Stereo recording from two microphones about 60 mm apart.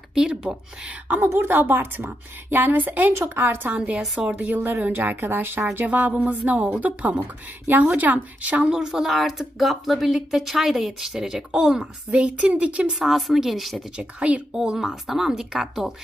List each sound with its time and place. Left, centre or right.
0.1 s speech: centre
1.0 s speech: right
3.7 s speech: right
4.0 s speech: centre
4.3 s speech: right
8.7 s speech: centre
12.1 s speech: right
12.9 s speech: centre
13.9 s speech: centre
14.6 s speech: centre